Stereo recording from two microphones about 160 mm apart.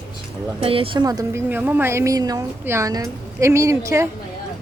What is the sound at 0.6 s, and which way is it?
A woman's voice, 35° right (ahead or behind).